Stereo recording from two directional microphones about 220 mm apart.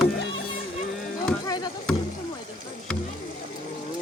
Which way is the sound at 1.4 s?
20° left (ahead or behind).